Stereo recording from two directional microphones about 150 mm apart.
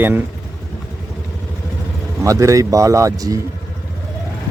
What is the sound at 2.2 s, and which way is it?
A man's voice, 20° right (ahead or behind).